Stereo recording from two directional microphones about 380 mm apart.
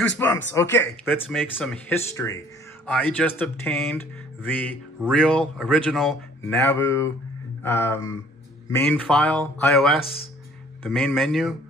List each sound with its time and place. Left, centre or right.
0.2 s speech: centre